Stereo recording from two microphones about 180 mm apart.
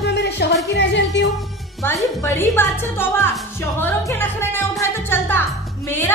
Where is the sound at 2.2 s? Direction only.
15° left (ahead or behind).